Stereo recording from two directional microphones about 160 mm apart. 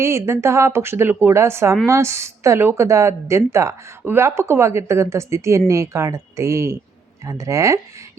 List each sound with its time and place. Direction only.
0.0 s a woman's voice: 15° right (ahead or behind)